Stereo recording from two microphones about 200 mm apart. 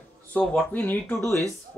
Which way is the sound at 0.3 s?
5° left (ahead or behind).